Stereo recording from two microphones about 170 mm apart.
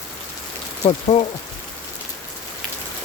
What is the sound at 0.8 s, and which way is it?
Speech, 40° left (ahead or behind).